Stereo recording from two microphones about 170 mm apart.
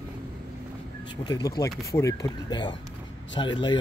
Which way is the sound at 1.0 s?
25° left (ahead or behind).